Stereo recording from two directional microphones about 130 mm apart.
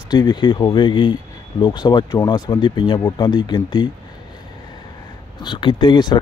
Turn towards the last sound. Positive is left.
turn(degrees=35)  # may be behind; listen again after turning